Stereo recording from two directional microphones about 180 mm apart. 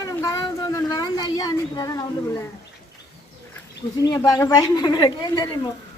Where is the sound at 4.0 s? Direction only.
20° left (ahead or behind).